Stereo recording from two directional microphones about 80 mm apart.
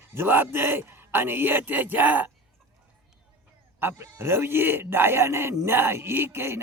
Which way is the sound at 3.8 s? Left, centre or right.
Right.